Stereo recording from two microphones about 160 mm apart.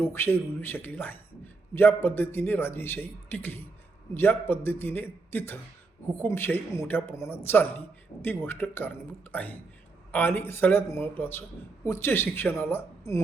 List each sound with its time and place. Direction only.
0.0 s a man's voice: 15° left (ahead or behind)